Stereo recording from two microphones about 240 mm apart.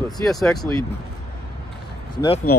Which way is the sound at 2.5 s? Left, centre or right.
Left.